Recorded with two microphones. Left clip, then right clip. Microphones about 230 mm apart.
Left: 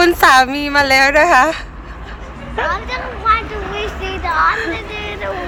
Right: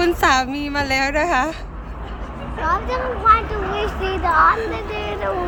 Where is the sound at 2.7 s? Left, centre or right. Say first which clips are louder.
Right 4 dB; right.